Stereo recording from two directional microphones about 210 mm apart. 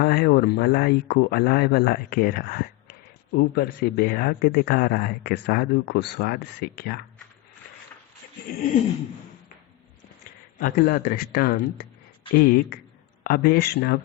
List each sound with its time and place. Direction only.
0.0 s speech: 50° left (ahead or behind)
10.6 s speech: 45° left (ahead or behind)